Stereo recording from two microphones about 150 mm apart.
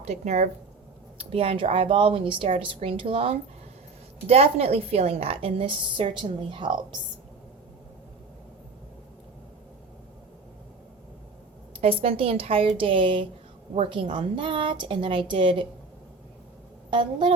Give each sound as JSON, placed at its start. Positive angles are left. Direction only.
{"t": 0.0, "sound": "a woman's voice", "side_deg": -45}
{"t": 11.8, "sound": "a woman's voice", "side_deg": -40}
{"t": 16.9, "sound": "a woman's voice", "side_deg": -35}